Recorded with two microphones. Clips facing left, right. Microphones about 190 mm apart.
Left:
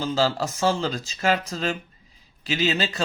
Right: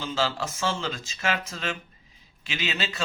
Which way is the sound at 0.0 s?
40° left (ahead or behind).